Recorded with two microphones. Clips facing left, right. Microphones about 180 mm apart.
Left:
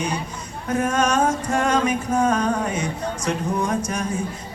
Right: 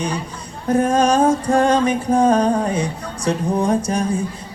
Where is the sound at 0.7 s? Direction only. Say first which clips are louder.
Right 5 dB; 30° right (ahead or behind).